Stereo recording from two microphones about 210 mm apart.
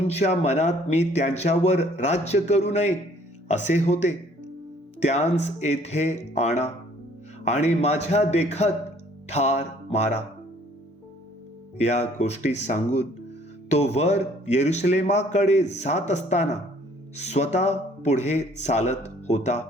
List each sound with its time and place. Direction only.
0.1 s speech: 30° left (ahead or behind)
9.2 s music: 30° left (ahead or behind)
11.8 s speech: 35° left (ahead or behind)